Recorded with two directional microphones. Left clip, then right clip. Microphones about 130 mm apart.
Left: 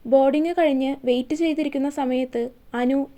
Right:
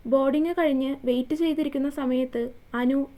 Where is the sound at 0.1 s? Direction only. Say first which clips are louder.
Left 5 dB; 25° left (ahead or behind).